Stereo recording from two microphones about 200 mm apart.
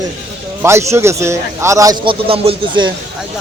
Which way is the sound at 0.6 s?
15° right (ahead or behind).